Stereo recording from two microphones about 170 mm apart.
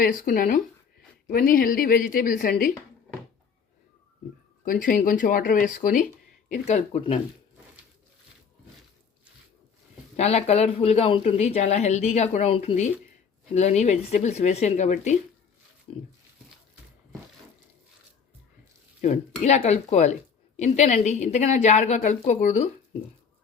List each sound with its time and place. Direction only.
0.0 s a woman's voice: 55° left (ahead or behind)
4.6 s a woman's voice: 55° left (ahead or behind)
6.7 s speech: 40° left (ahead or behind)
10.2 s speech: 40° left (ahead or behind)
19.0 s a woman's voice: 40° left (ahead or behind)